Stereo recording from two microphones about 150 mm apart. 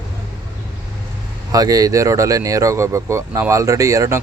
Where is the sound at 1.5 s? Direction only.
25° right (ahead or behind).